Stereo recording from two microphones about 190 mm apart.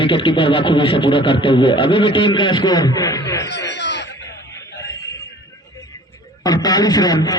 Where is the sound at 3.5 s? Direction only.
65° left (ahead or behind).